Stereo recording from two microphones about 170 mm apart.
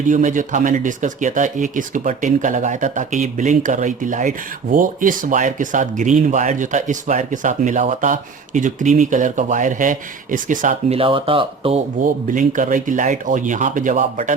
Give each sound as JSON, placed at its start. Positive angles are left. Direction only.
{"t": 0.1, "sound": "speech", "side_deg": -50}
{"t": 10.9, "sound": "speech", "side_deg": -30}
{"t": 12.0, "sound": "speech", "side_deg": -50}